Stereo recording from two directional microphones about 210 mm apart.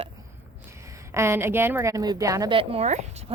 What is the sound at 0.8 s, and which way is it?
A woman's voice, 15° right (ahead or behind).